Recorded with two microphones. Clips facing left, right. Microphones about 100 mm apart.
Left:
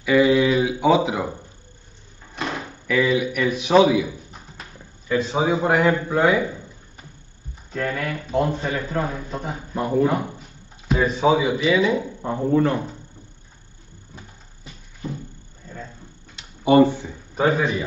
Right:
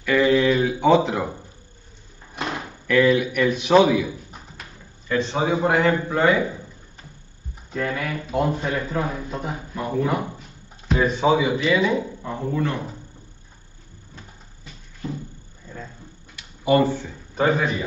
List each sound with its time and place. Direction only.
0.0 s a sound: 10° left (ahead or behind)
2.9 s a man's voice: centre (ahead or behind)
7.7 s a man's voice: 5° right (ahead or behind)
10.9 s a man's voice: centre (ahead or behind)
12.2 s speech: 30° left (ahead or behind)
16.3 s a sound: 25° left (ahead or behind)
17.4 s a man's voice: centre (ahead or behind)